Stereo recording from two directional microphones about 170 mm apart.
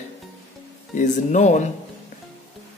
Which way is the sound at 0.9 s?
45° left (ahead or behind).